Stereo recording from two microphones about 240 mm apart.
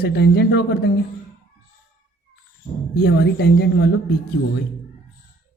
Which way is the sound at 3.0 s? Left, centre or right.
Left.